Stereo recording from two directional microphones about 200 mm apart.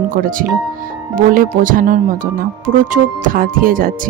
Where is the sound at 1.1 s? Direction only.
45° right (ahead or behind).